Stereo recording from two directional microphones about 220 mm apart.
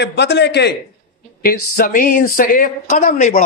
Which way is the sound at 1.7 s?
40° left (ahead or behind).